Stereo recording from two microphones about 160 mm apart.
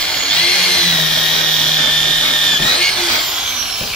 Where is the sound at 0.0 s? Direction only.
5° left (ahead or behind).